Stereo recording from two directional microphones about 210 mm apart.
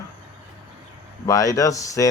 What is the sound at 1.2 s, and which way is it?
Speech, 15° left (ahead or behind).